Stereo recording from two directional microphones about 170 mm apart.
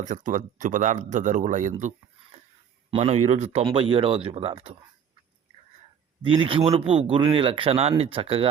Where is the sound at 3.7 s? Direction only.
30° right (ahead or behind).